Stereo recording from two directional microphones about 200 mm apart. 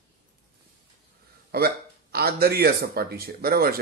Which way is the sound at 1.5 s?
50° right (ahead or behind).